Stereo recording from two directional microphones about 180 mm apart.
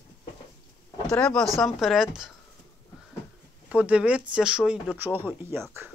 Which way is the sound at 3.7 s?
5° right (ahead or behind).